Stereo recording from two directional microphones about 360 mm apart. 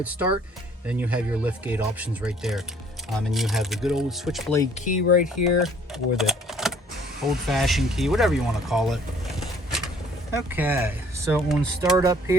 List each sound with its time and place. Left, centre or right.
0.0 s speech: centre
4.6 s speech: centre
5.6 s speech: centre